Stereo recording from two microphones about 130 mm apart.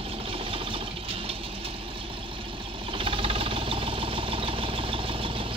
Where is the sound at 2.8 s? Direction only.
40° right (ahead or behind).